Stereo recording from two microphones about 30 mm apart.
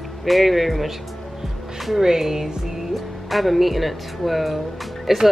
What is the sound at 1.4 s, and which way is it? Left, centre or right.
Music, centre.